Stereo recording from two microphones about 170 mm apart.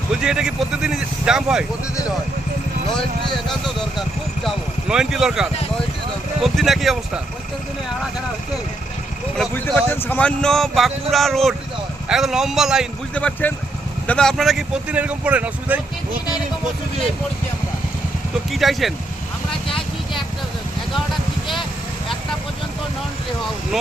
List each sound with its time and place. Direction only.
0.2 s speech: 5° right (ahead or behind)
4.4 s speech: 5° right (ahead or behind)
9.4 s speech: 5° left (ahead or behind)
13.1 s speech: 10° left (ahead or behind); by 15.8 s 10° right (ahead or behind)
18.5 s speech: centre (ahead or behind)
19.6 s vehicle: 30° left (ahead or behind)